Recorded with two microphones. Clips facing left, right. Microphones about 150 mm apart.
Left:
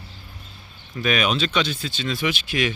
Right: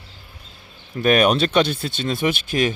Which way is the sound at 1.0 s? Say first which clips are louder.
Right 6 dB; 50° right (ahead or behind).